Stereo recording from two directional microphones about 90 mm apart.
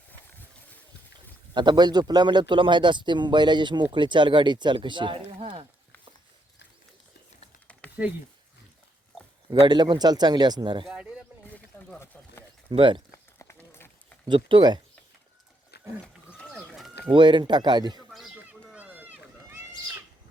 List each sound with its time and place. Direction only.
1.5 s speech: 55° right (ahead or behind); by 5.6 s 85° right
7.7 s a sound: 15° left (ahead or behind)
9.5 s a man's voice: 55° right (ahead or behind)
10.9 s a sound: 10° right (ahead or behind)
12.7 s speech: 70° right (ahead or behind)
13.1 s run: 30° left (ahead or behind)
14.3 s speech: 70° right (ahead or behind)
17.1 s speech: 65° right (ahead or behind)
18.3 s run: 15° right (ahead or behind)